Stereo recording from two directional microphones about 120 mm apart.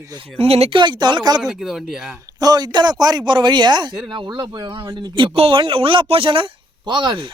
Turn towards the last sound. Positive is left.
turn(degrees=-40)  # may be behind; listen again after turning